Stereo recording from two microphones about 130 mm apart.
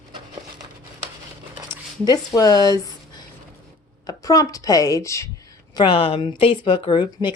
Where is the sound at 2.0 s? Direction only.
30° left (ahead or behind).